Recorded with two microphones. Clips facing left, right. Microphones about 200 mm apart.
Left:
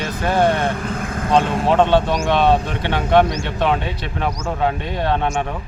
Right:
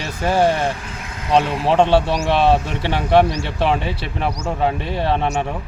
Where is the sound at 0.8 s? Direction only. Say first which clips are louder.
Left 9 dB; 55° left (ahead or behind).